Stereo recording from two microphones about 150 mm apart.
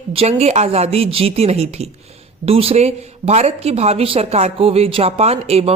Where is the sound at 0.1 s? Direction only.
45° right (ahead or behind).